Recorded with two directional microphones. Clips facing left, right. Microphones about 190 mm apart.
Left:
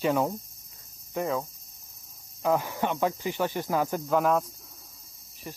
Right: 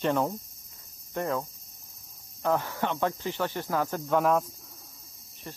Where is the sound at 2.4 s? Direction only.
10° left (ahead or behind).